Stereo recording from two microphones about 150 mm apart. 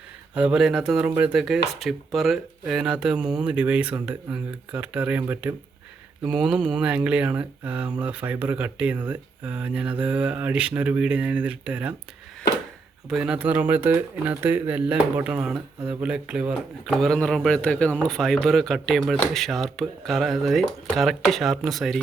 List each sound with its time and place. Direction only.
0.3 s speech: 5° right (ahead or behind)
13.1 s speech: 5° right (ahead or behind)